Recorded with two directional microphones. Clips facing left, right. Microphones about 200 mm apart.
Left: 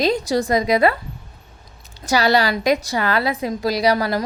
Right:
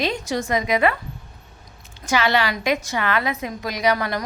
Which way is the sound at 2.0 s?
40° left (ahead or behind).